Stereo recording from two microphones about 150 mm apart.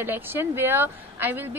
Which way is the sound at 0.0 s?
15° right (ahead or behind).